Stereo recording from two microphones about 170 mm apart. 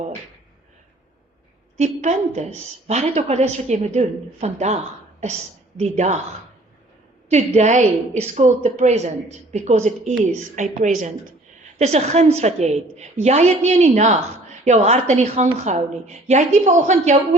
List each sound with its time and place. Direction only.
1.7 s a woman's voice: 40° right (ahead or behind)
7.3 s a woman's voice: 40° right (ahead or behind)